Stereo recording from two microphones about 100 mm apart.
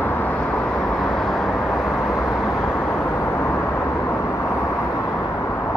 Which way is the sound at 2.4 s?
25° left (ahead or behind).